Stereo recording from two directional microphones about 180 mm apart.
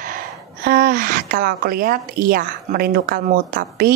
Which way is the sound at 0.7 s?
50° right (ahead or behind).